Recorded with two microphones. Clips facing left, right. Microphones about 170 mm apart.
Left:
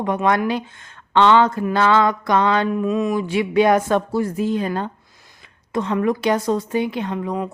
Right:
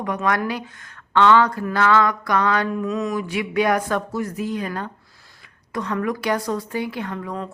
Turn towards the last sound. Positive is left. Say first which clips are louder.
# left 5 dB
turn(degrees=15)  # may be behind; listen again after turning